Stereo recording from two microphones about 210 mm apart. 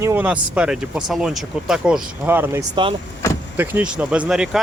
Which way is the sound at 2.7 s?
25° right (ahead or behind).